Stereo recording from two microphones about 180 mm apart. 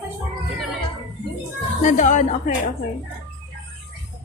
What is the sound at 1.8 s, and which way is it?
Speech, 45° left (ahead or behind).